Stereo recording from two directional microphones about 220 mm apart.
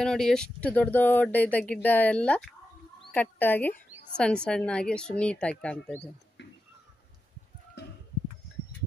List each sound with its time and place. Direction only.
0.0 s a woman's voice: centre (ahead or behind)
7.8 s horse: 50° left (ahead or behind)